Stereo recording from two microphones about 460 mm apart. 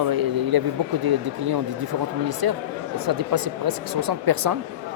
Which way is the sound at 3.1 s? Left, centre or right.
Right.